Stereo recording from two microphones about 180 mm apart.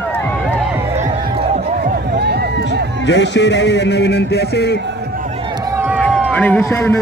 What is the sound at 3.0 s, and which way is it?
A man's voice, 75° left (ahead or behind).